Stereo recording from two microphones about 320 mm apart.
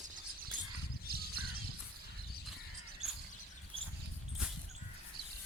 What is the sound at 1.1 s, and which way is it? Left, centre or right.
Crow, right.